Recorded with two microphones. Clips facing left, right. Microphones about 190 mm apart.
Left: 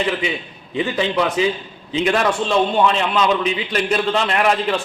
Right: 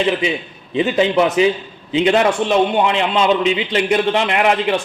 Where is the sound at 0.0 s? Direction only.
20° right (ahead or behind).